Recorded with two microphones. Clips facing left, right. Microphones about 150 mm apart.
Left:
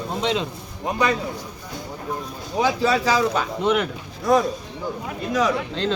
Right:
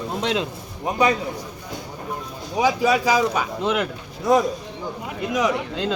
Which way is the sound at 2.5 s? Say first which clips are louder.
Right 1 dB; 10° right (ahead or behind).